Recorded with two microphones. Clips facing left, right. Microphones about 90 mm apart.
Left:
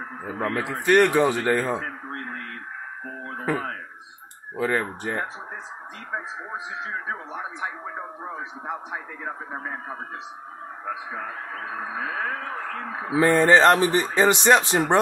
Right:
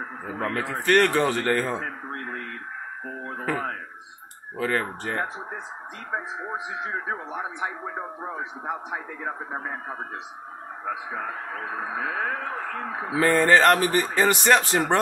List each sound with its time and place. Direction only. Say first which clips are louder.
0.2 s speech: left 2 dB; 5° left (ahead or behind)
3.1 s a sound: right 1 dB; 10° right (ahead or behind)
4.6 s speech: left 1 dB; 10° left (ahead or behind)
6.1 s a man's voice: right 2 dB; 15° right (ahead or behind)
11.1 s speech: right 1 dB; 25° right (ahead or behind)
13.1 s speech: left 2 dB; 20° left (ahead or behind)